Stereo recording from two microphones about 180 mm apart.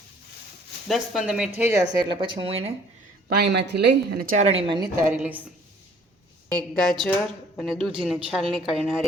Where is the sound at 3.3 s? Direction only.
65° right (ahead or behind).